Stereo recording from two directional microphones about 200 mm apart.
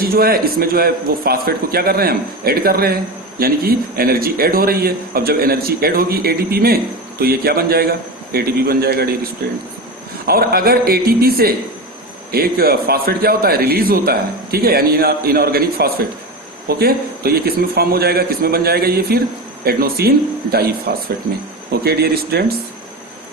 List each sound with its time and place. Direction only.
0.0 s a man's voice: 50° right (ahead or behind)